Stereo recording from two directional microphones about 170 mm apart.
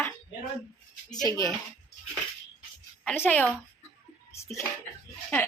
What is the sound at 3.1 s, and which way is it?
Speech, 10° left (ahead or behind).